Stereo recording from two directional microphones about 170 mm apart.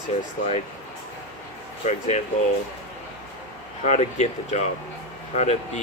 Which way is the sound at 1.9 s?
45° left (ahead or behind).